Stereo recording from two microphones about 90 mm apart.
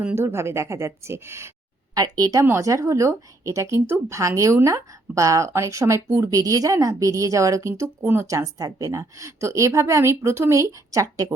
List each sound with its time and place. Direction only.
0.0 s speech: 25° right (ahead or behind)
2.0 s a woman's voice: 45° right (ahead or behind); by 8.3 s 25° right (ahead or behind)
8.3 s a woman's voice: 40° right (ahead or behind)